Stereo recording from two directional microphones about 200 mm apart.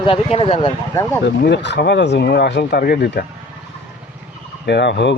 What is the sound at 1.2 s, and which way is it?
Speech, 60° left (ahead or behind).